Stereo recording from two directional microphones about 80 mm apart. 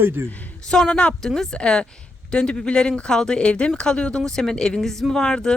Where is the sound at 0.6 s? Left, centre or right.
Centre.